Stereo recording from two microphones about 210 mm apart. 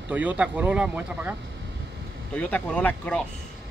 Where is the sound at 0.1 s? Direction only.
5° right (ahead or behind).